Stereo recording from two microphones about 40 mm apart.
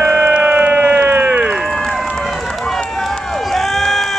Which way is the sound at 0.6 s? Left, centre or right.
Right.